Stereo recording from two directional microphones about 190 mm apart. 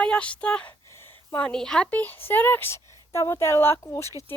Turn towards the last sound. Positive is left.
turn(degrees=15)  # may be behind; listen again after turning